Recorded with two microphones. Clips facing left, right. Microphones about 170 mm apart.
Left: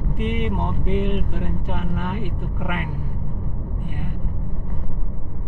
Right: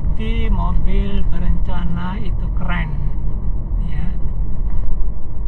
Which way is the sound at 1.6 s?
5° left (ahead or behind).